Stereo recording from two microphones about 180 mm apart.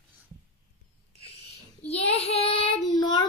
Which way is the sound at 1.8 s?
35° left (ahead or behind).